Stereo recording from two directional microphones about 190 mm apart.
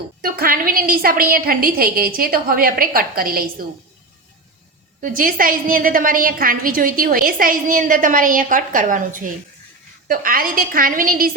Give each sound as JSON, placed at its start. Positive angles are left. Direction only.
{"t": 0.2, "sound": "a woman's voice", "side_deg": -50}
{"t": 5.0, "sound": "a woman's voice", "side_deg": -45}